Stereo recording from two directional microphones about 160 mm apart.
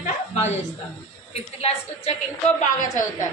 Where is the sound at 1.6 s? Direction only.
40° left (ahead or behind).